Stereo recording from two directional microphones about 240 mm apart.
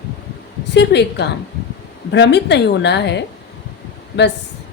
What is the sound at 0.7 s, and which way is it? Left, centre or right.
A woman's voice, left.